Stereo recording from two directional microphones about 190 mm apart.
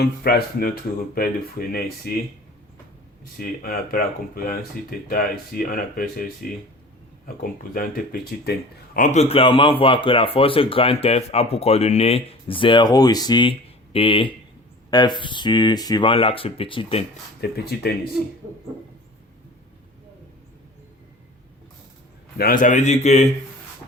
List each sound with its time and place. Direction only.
0.0 s speech: 55° left (ahead or behind)
3.3 s speech: 50° left (ahead or behind)
9.0 s speech: 35° left (ahead or behind)
17.4 s speech: 55° left (ahead or behind)
22.4 s speech: 50° left (ahead or behind)